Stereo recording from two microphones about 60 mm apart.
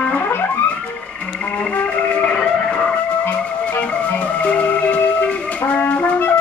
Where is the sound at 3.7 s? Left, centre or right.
Left.